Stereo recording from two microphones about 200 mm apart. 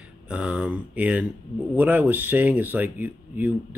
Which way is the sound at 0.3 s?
5° right (ahead or behind).